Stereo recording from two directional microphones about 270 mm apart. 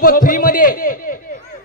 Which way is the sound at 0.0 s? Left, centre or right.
Left.